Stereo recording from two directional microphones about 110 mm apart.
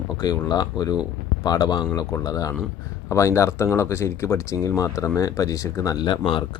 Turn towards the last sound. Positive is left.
turn(degrees=50)  # may be behind; listen again after turning